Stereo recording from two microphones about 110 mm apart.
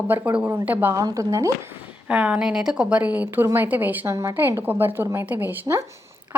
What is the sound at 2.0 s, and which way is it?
A woman's voice, 10° right (ahead or behind).